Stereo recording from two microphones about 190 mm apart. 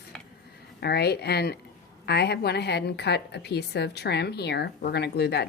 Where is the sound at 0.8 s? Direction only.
60° left (ahead or behind).